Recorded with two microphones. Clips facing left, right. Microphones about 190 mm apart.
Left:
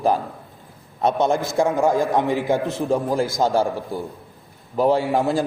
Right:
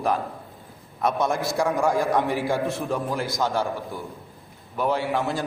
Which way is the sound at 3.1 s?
45° left (ahead or behind).